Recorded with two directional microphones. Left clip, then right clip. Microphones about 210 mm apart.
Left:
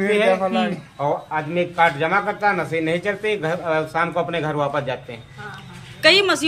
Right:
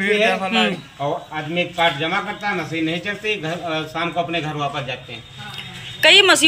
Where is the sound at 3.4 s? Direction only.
15° left (ahead or behind).